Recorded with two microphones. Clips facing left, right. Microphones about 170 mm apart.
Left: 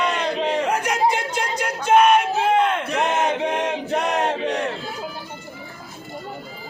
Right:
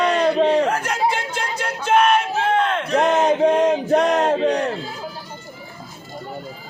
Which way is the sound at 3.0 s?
40° right (ahead or behind).